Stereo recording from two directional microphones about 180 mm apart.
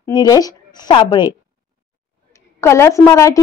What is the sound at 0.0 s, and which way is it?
A woman's voice, 20° left (ahead or behind).